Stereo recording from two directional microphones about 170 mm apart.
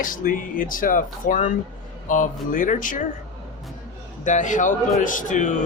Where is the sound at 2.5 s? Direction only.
50° left (ahead or behind).